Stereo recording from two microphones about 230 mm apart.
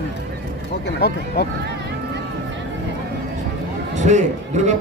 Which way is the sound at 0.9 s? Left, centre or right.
Left.